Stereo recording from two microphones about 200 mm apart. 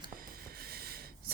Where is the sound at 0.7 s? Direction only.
50° right (ahead or behind).